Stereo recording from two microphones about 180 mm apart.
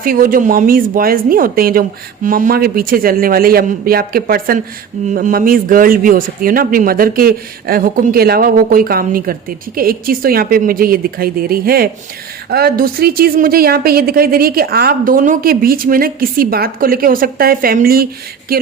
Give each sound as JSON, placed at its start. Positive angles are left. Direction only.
{"t": 0.0, "sound": "a man's voice", "side_deg": -55}